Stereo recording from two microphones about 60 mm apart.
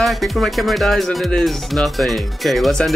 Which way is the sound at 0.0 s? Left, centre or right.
Centre.